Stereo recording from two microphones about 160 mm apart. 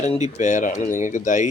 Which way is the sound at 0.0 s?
45° left (ahead or behind).